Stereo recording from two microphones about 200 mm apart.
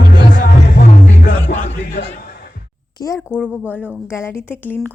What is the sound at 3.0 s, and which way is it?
A woman's voice, 15° left (ahead or behind).